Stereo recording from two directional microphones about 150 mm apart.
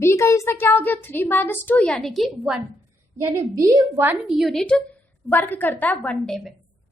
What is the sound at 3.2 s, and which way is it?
Speech, 25° right (ahead or behind).